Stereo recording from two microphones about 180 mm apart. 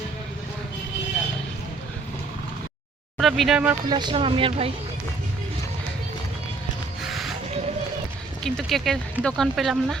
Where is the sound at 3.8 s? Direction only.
25° right (ahead or behind).